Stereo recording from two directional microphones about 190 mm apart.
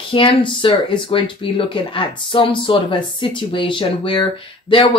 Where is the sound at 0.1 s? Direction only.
25° left (ahead or behind).